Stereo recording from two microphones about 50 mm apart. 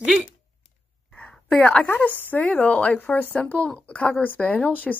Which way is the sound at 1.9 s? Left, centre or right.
Left.